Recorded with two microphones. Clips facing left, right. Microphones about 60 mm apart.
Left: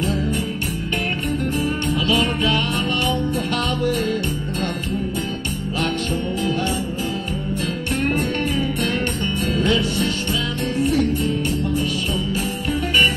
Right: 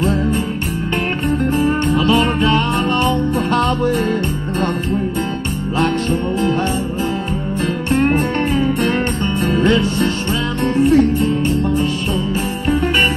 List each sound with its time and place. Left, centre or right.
1.4 s music: right
7.9 s music: right